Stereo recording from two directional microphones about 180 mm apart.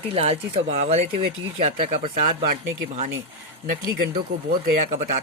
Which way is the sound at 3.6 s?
55° right (ahead or behind).